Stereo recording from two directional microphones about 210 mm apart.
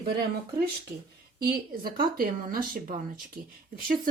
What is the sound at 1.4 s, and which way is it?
Speech, 45° right (ahead or behind).